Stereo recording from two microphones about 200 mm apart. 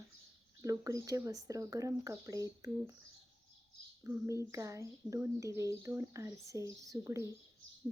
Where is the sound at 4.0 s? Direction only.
15° right (ahead or behind).